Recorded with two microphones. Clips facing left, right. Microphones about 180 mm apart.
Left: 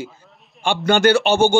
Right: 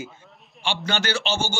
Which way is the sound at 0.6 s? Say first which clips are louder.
Left 10 dB; 50° left (ahead or behind).